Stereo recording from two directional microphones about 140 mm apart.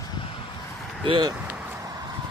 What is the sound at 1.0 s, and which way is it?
Speech, 40° right (ahead or behind).